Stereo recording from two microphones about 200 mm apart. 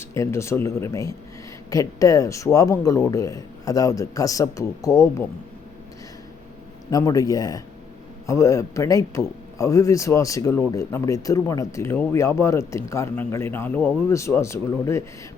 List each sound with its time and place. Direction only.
0.0 s a man's voice: 15° left (ahead or behind)
6.9 s a man's voice: 15° left (ahead or behind)